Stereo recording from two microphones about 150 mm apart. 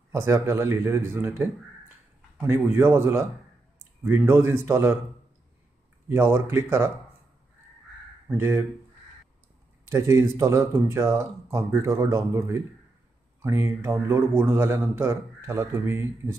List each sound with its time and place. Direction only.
0.1 s speech: 20° right (ahead or behind)
6.0 s speech: 15° right (ahead or behind)
8.4 s speech: 15° right (ahead or behind)
9.8 s speech: 20° right (ahead or behind)